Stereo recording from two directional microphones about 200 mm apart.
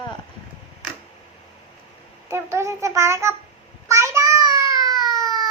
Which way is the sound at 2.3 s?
15° right (ahead or behind).